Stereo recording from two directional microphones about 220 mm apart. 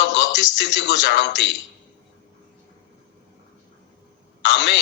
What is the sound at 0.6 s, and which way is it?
Speech, 50° left (ahead or behind).